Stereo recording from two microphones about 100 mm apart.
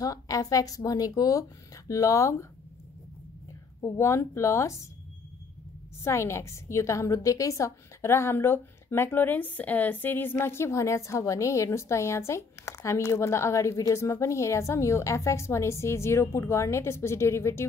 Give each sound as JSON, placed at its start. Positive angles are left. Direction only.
{"t": 0.0, "sound": "speech", "side_deg": 35}
{"t": 3.8, "sound": "a woman's voice", "side_deg": 30}
{"t": 6.0, "sound": "a woman's voice", "side_deg": 30}